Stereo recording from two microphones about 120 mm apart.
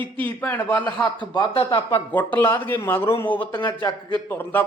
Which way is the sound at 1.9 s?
15° left (ahead or behind).